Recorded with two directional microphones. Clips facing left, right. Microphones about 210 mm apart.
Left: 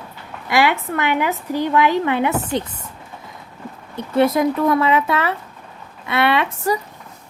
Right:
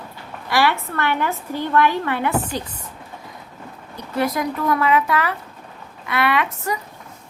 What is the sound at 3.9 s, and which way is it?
A woman's voice, 25° left (ahead or behind).